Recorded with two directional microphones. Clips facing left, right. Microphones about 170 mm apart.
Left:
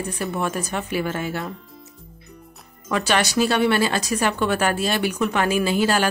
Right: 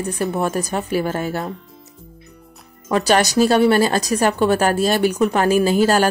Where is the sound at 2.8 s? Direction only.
35° right (ahead or behind).